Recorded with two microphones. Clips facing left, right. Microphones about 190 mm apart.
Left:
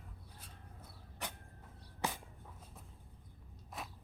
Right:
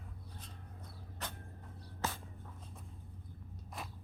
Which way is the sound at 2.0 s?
15° left (ahead or behind).